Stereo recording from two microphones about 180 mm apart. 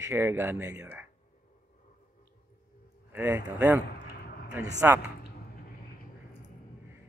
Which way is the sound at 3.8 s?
60° left (ahead or behind).